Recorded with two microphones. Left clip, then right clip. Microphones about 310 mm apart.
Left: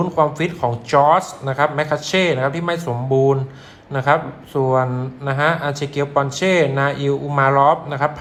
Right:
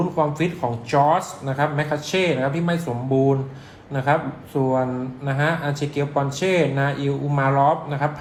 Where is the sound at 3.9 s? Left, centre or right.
Left.